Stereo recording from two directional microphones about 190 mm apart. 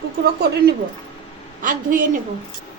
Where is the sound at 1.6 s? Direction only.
45° right (ahead or behind).